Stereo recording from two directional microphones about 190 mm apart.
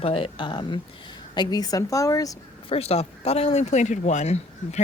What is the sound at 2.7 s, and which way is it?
Speech, 30° left (ahead or behind).